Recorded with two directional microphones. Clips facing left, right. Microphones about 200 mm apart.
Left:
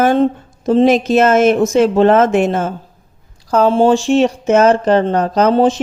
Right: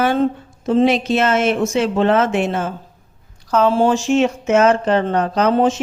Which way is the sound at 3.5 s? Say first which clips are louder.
Left 4 dB; 30° left (ahead or behind).